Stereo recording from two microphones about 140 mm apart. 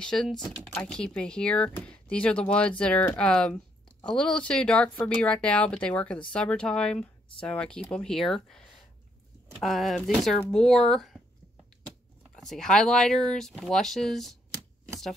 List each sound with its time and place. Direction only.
0.0 s speech: 5° left (ahead or behind)
12.4 s speech: 5° left (ahead or behind)